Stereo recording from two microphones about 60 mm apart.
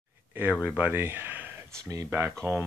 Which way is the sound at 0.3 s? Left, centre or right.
Right.